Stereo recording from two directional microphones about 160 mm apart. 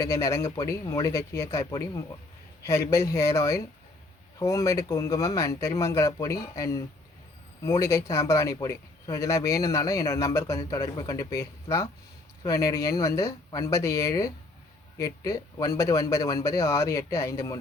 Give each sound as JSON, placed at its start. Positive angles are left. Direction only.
{"t": 0.0, "sound": "speech", "side_deg": 20}